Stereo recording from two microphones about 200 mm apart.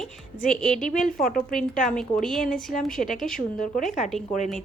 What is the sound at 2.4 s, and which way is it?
Speech, 40° left (ahead or behind).